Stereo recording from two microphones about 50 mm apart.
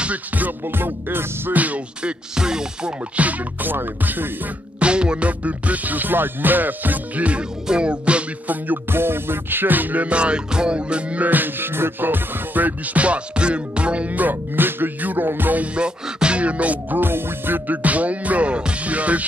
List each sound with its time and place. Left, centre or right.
0.0 s music: right
0.7 s music: right
1.5 s music: right
2.3 s music: centre
3.2 s music: right
3.7 s music: right
4.7 s music: right
8.9 s music: right
15.6 s music: right
17.0 s music: right
17.8 s music: right